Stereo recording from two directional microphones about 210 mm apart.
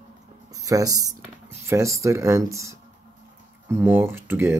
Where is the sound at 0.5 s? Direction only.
15° right (ahead or behind).